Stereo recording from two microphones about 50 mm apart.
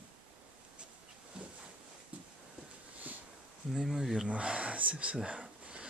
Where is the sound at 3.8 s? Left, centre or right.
Centre.